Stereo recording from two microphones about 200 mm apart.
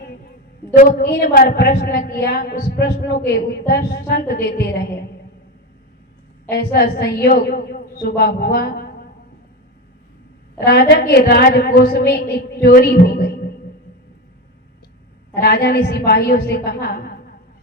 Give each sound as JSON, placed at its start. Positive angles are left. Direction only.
{"t": 0.8, "sound": "a woman's voice", "side_deg": 50}
{"t": 6.5, "sound": "a woman's voice", "side_deg": 50}
{"t": 10.6, "sound": "a woman's voice", "side_deg": 55}
{"t": 15.4, "sound": "a woman's voice", "side_deg": 55}